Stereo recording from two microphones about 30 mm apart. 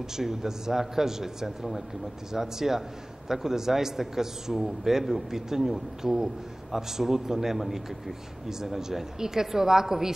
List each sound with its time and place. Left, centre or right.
0.1 s a man's voice: centre